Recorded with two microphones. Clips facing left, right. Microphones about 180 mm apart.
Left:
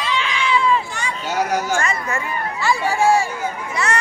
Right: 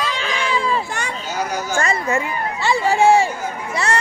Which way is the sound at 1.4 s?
80° left.